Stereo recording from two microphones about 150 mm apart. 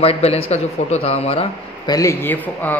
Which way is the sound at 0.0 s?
40° left (ahead or behind).